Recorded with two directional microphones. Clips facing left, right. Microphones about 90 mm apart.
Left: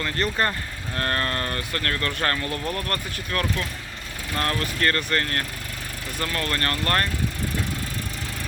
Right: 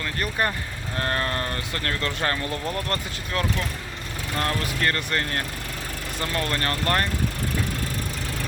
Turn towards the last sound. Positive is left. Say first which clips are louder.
# even
turn(degrees=-20)  # may be behind; listen again after turning